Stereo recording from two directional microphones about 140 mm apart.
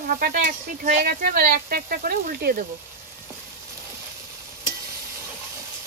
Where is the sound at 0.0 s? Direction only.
85° right.